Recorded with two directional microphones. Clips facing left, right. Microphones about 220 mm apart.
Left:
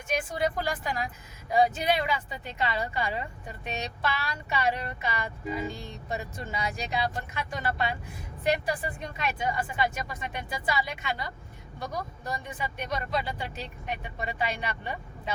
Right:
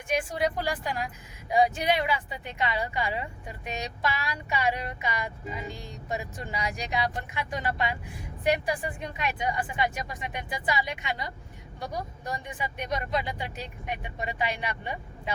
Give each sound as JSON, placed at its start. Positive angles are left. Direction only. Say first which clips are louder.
{"t": 0.1, "sound": "a woman's voice", "louder": "right 1 dB", "side_deg": -15}